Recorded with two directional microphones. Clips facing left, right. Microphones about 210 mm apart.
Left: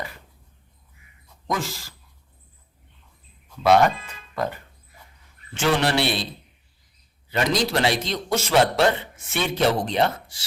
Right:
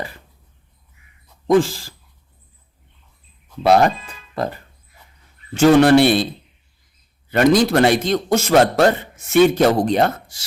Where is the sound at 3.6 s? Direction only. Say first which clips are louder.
Right 3 dB; 35° right (ahead or behind); by 6.3 s 50° right (ahead or behind).